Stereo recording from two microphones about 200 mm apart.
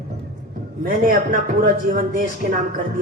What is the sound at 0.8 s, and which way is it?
A man's voice, 45° right (ahead or behind).